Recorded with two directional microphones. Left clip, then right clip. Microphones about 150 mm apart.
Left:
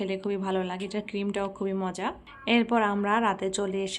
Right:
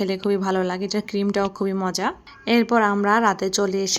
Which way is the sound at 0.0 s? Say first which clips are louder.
Right 8 dB; 50° right (ahead or behind).